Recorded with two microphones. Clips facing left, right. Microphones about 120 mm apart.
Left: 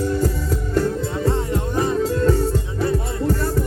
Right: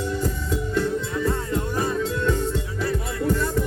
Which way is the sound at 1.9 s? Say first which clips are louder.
Left 5 dB; 40° left (ahead or behind).